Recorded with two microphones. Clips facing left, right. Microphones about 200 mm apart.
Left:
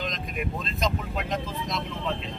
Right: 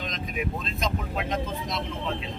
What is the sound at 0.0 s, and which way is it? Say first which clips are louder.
Speech: even; centre (ahead or behind).